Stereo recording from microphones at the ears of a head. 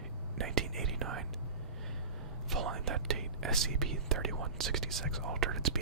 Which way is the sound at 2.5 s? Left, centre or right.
Right.